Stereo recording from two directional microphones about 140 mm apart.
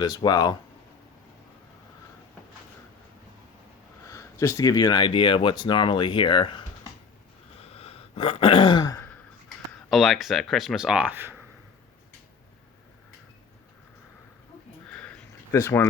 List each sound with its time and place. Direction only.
0.0 s speech: 30° left (ahead or behind)
4.0 s speech: 20° left (ahead or behind)
7.6 s throat clearing: 45° left (ahead or behind); by 9.0 s 30° left (ahead or behind)
9.0 s sigh: 10° left (ahead or behind)
9.9 s speech: centre (ahead or behind)
14.8 s sniff: 5° left (ahead or behind)
15.5 s speech: 20° left (ahead or behind)